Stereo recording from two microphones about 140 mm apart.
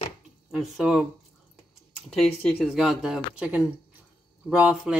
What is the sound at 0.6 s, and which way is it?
Speech, 5° right (ahead or behind).